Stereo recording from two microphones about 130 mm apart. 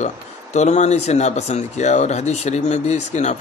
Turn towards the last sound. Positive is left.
turn(degrees=60)  # may be behind; listen again after turning